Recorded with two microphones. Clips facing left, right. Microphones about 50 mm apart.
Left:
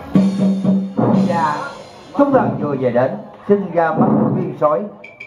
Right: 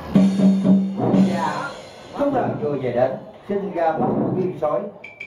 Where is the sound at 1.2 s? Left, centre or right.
Left.